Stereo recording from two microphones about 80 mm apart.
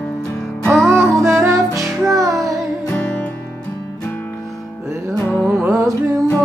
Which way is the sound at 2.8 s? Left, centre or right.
Centre.